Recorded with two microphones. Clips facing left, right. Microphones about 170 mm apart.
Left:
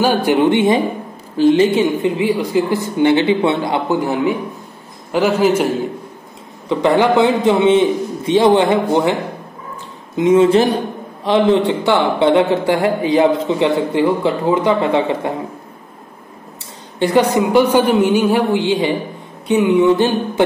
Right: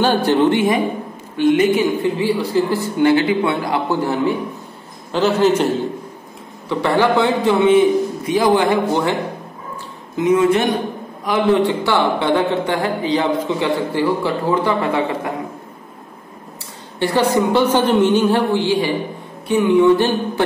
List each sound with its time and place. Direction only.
0.0 s a woman's voice: 10° left (ahead or behind)
6.7 s speech: 20° left (ahead or behind)
10.1 s speech: 25° left (ahead or behind)
17.0 s a woman's voice: 20° left (ahead or behind)